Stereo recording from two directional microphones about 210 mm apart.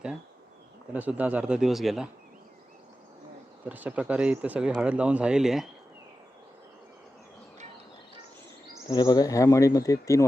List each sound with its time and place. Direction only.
0.9 s speech: 5° right (ahead or behind)
3.7 s speech: 5° right (ahead or behind)
8.9 s speech: 20° left (ahead or behind)